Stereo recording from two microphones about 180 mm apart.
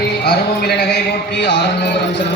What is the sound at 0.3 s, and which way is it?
A man's voice, 65° left (ahead or behind).